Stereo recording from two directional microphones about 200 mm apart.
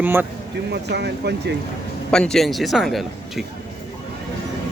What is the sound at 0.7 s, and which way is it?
Speech, 55° right (ahead or behind).